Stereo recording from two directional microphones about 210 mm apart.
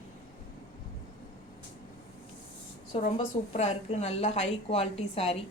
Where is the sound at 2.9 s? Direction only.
30° left (ahead or behind).